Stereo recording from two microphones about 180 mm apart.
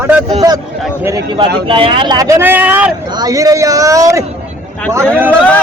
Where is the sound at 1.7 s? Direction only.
30° right (ahead or behind); by 2.9 s 10° right (ahead or behind).